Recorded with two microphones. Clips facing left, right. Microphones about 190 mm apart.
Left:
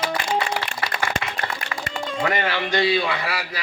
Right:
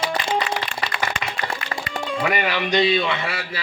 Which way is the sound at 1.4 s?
15° right (ahead or behind).